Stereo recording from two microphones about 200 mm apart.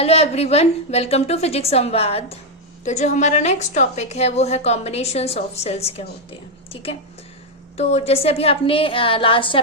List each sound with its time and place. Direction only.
0.0 s a woman's voice: 30° left (ahead or behind)
7.8 s a woman's voice: 30° left (ahead or behind)